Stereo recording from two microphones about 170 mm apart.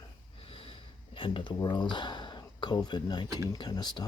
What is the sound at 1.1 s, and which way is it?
Speech, 30° left (ahead or behind).